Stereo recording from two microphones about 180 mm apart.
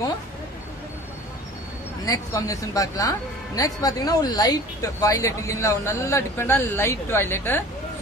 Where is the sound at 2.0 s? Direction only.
20° left (ahead or behind).